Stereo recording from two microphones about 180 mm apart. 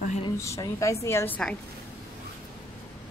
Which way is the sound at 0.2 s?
20° left (ahead or behind).